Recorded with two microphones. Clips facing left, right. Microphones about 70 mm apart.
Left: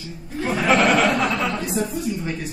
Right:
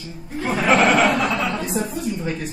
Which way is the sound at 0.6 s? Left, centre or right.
Right.